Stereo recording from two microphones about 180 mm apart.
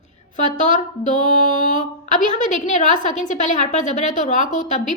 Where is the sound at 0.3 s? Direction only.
45° left (ahead or behind).